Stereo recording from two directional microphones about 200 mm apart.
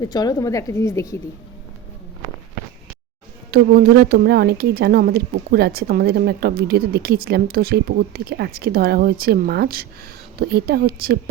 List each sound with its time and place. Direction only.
0.0 s a woman's voice: 20° left (ahead or behind)
3.5 s speech: 50° right (ahead or behind)